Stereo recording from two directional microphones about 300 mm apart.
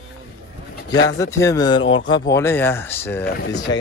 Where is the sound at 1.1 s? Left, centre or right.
Centre.